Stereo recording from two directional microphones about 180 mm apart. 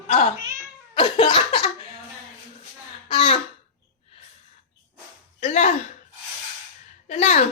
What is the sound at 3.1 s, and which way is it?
Throat clearing, 30° left (ahead or behind).